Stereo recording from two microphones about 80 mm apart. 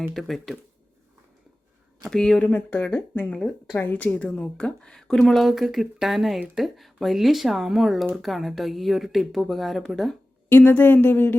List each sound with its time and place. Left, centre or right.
0.0 s speech: centre
2.0 s a woman's voice: centre
2.4 s a woman's voice: left; by 10.2 s centre
10.5 s speech: left